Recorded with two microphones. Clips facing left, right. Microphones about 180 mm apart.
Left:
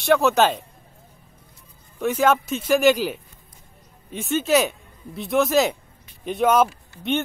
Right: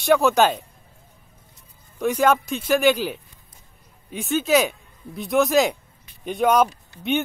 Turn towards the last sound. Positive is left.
turn(degrees=0)  # may be behind; listen again after turning